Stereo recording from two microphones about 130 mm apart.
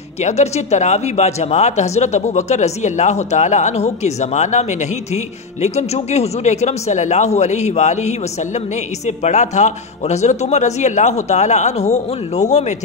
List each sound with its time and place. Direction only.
0.2 s speech: 60° left (ahead or behind)